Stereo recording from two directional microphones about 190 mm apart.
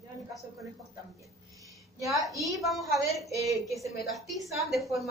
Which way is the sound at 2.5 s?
Centre (ahead or behind).